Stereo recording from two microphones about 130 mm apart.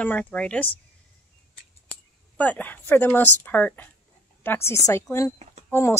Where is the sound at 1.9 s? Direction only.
10° left (ahead or behind).